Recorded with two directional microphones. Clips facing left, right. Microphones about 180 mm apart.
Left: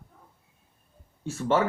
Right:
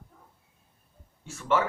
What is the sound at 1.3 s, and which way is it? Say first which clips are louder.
Speech: left 2 dB; 35° left (ahead or behind).